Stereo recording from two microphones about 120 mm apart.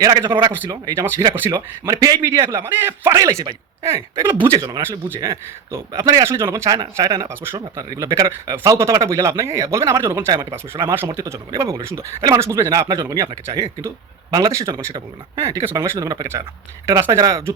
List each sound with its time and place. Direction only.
0.0 s speech: 30° right (ahead or behind)
0.3 s a man's voice: 45° right (ahead or behind)
0.7 s speech: 30° right (ahead or behind)
4.5 s speech: 35° right (ahead or behind)
4.8 s speech: 20° right (ahead or behind)